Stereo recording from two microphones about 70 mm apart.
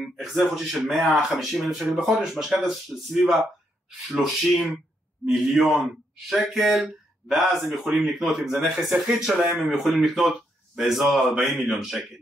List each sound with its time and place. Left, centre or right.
0.0 s speech: centre